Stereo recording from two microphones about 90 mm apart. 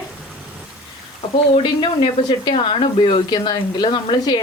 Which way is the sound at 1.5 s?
65° left (ahead or behind).